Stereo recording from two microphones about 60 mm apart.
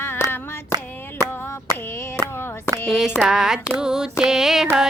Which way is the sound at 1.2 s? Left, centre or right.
Left.